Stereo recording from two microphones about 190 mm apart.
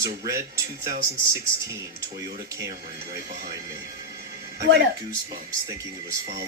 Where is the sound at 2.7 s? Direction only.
55° right (ahead or behind).